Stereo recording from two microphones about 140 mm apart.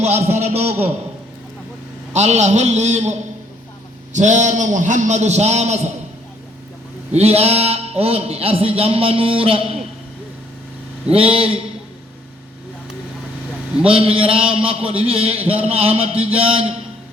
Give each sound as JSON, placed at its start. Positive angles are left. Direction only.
{"t": 0.0, "sound": "a man's voice", "side_deg": -55}
{"t": 2.1, "sound": "a man's voice", "side_deg": -55}
{"t": 7.1, "sound": "a man's voice", "side_deg": -45}
{"t": 11.1, "sound": "a sound", "side_deg": -40}
{"t": 13.8, "sound": "a man's voice", "side_deg": -40}